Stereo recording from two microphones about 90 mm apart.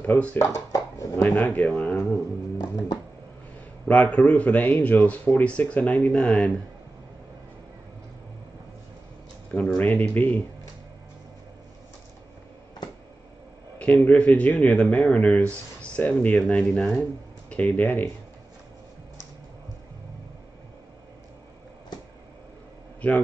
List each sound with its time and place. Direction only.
0.4 s speech: 35° left (ahead or behind)
1.3 s speech: 15° left (ahead or behind)
1.8 s a sound: 20° left (ahead or behind)
2.6 s music: 50° left (ahead or behind)
3.8 s speech: 15° left (ahead or behind)
9.6 s speech: 5° left (ahead or behind)
9.8 s speech: 15° left (ahead or behind)
14.0 s speech: 15° left (ahead or behind)
16.4 s speech: 5° left (ahead or behind)
17.5 s speech: 15° left (ahead or behind)